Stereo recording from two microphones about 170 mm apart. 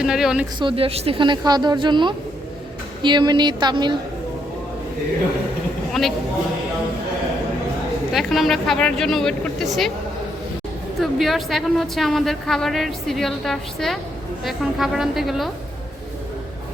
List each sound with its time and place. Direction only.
0.0 s a woman's voice: 5° right (ahead or behind)
0.6 s a woman's voice: 35° right (ahead or behind)
5.9 s a woman's voice: centre (ahead or behind)
8.1 s a woman's voice: centre (ahead or behind)
11.0 s a woman's voice: centre (ahead or behind)